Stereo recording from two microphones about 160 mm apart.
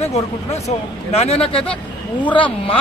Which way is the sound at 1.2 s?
40° left (ahead or behind).